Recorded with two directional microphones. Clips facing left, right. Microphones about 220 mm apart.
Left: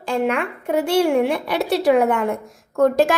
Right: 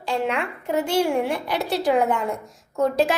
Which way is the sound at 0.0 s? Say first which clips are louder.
Left 4 dB; 50° left (ahead or behind).